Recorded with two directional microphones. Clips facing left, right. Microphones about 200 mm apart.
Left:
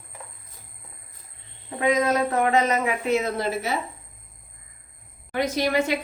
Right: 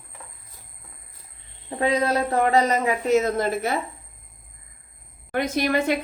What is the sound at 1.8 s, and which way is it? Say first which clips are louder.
Speech: even; 35° right (ahead or behind).